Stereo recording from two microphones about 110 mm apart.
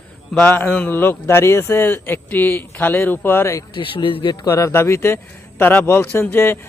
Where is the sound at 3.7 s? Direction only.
50° left (ahead or behind).